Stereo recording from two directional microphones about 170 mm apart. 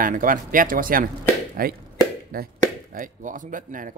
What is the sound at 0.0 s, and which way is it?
Speech, 55° right (ahead or behind).